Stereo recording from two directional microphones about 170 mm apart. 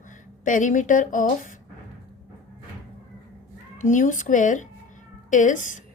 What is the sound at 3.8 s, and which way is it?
A woman's voice, 50° left (ahead or behind).